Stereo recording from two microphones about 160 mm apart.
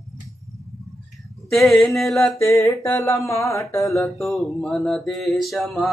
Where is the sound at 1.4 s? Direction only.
Centre (ahead or behind).